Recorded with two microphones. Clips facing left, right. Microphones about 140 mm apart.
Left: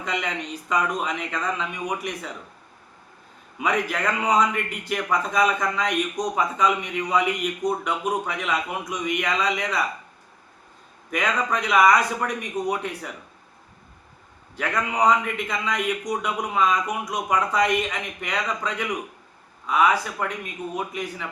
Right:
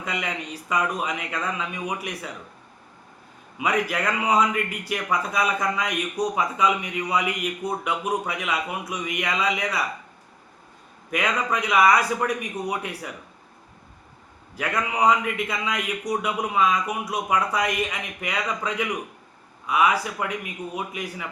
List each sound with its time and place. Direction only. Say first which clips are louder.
0.0 s a man's voice: left 2 dB; 5° right (ahead or behind)
3.6 s a man's voice: even; 10° right (ahead or behind)
11.1 s a man's voice: even; 10° right (ahead or behind)
14.5 s a man's voice: left 1 dB; 10° right (ahead or behind)